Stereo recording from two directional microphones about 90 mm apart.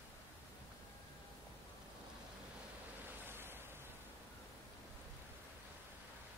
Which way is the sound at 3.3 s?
25° right (ahead or behind).